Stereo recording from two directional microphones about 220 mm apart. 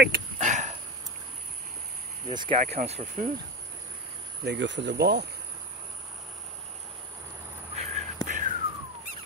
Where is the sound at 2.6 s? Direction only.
30° right (ahead or behind).